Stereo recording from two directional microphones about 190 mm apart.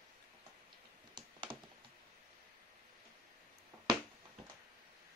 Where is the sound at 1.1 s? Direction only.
25° right (ahead or behind).